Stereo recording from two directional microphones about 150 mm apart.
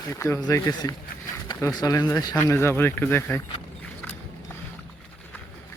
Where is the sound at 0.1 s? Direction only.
20° left (ahead or behind).